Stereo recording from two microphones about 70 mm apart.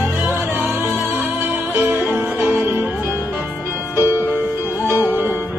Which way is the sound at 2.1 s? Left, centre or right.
Right.